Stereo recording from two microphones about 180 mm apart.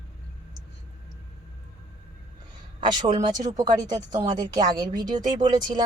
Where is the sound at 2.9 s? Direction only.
25° right (ahead or behind).